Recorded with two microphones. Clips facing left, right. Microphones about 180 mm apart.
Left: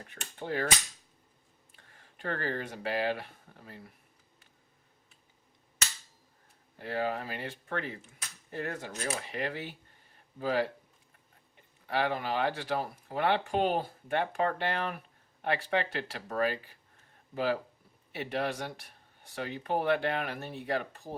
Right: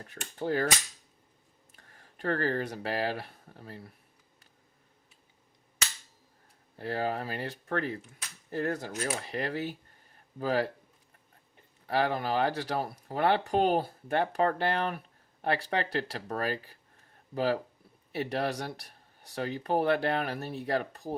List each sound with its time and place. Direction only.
0.1 s speech: 40° right (ahead or behind)
1.7 s speech: 40° right (ahead or behind)
6.7 s speech: 35° right (ahead or behind)
11.9 s speech: 35° right (ahead or behind)